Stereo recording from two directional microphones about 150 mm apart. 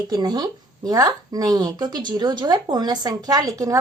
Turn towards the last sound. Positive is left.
turn(degrees=-25)  # may be behind; listen again after turning